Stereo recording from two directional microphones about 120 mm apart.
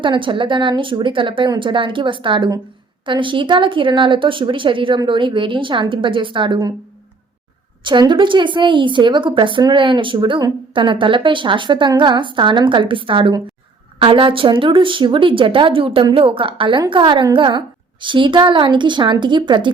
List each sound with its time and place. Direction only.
0.0 s a woman's voice: 45° right (ahead or behind)
7.9 s a woman's voice: 40° right (ahead or behind)